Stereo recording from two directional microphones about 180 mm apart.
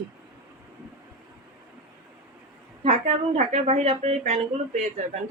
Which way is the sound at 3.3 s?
40° right (ahead or behind).